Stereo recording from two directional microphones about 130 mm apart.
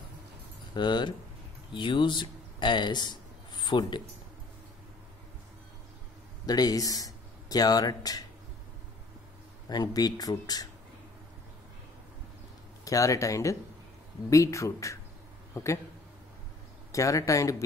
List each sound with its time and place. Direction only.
0.7 s speech: 35° left (ahead or behind)
6.4 s speech: 30° left (ahead or behind)
9.7 s speech: 30° left (ahead or behind)
12.8 s speech: 25° left (ahead or behind)
16.9 s speech: 25° left (ahead or behind)